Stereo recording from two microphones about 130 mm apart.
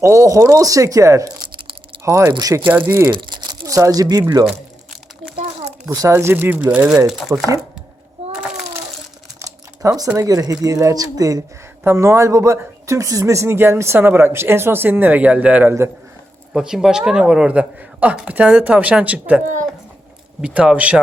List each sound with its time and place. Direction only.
0.0 s speech: 20° right (ahead or behind)
3.1 s crumpling: 35° right (ahead or behind)
3.8 s speech: 25° right (ahead or behind)
5.9 s speech: 25° right (ahead or behind); by 7.4 s 5° right (ahead or behind)
9.4 s computer keyboard: 25° right (ahead or behind)
10.2 s speech: 25° right (ahead or behind); by 19.4 s 10° right (ahead or behind)
20.4 s speech: 10° right (ahead or behind)